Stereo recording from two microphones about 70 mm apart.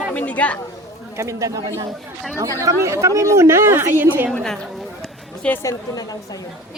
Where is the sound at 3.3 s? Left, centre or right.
Right.